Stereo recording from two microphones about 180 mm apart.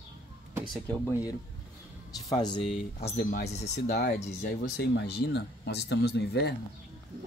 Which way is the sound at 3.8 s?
60° left (ahead or behind).